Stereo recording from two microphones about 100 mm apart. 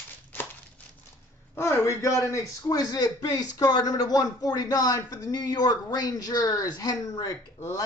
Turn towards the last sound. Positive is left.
turn(degrees=35)  # may be behind; listen again after turning